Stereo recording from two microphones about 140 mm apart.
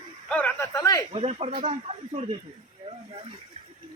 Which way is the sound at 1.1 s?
45° right (ahead or behind).